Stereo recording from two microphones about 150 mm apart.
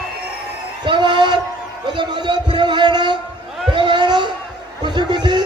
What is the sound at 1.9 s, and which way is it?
Speech, 30° right (ahead or behind).